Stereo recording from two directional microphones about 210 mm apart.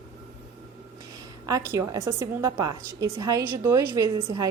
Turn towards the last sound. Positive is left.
turn(degrees=-15)  # may be behind; listen again after turning